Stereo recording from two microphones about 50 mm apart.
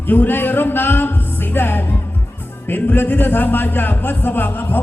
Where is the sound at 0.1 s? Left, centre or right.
Left.